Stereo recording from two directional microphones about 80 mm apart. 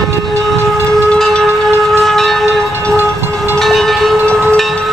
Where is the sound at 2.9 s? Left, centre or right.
Right.